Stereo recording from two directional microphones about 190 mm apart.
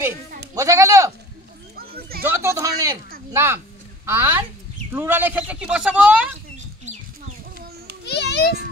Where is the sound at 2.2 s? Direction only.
10° right (ahead or behind).